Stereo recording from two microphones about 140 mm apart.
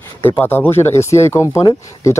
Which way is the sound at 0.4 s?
15° left (ahead or behind).